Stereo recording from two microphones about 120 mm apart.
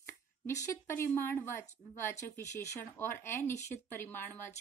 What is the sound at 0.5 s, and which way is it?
Speech, 25° left (ahead or behind).